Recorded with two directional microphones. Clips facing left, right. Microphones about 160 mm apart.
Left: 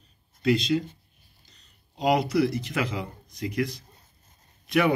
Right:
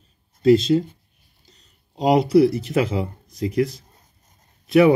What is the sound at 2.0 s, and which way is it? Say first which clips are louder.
Speech: right 7 dB; 35° right (ahead or behind).